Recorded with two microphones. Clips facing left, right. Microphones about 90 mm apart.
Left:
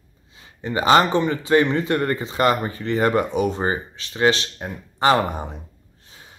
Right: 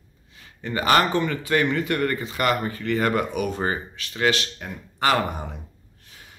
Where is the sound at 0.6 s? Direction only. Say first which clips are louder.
Left 4 dB; 20° left (ahead or behind).